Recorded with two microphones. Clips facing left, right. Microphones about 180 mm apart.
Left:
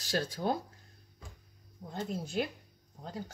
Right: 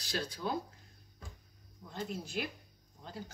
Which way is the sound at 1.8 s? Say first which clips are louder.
Left 6 dB; 40° left (ahead or behind).